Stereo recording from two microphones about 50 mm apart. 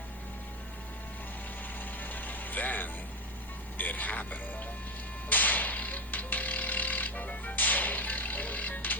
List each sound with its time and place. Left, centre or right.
1.8 s vehicle: left
3.8 s music: left
5.3 s a sound: left